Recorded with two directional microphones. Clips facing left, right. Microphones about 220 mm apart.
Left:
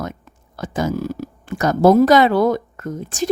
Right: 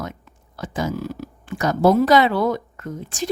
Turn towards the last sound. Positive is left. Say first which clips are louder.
# left 4 dB
turn(degrees=45)  # may be behind; listen again after turning